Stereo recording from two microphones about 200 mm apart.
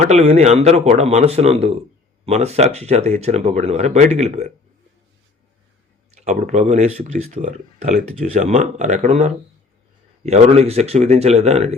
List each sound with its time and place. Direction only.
0.0 s speech: 30° right (ahead or behind)
6.1 s speech: 35° right (ahead or behind)